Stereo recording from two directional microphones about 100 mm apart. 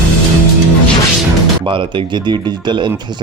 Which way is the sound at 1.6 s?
55° right (ahead or behind).